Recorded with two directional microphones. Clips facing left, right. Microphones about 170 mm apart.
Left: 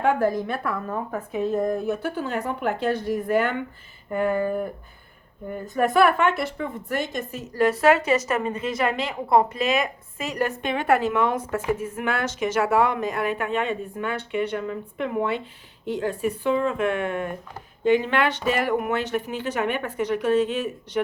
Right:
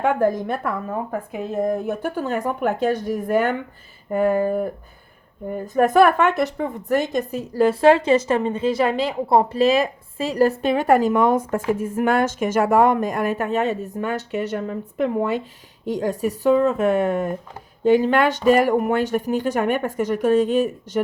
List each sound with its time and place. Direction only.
0.0 s a woman's voice: 50° right (ahead or behind)